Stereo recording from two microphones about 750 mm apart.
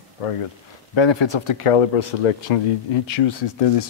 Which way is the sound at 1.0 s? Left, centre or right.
Left.